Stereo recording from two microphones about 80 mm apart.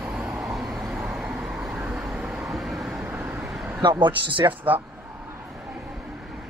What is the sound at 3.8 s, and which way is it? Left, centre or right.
Speech, right.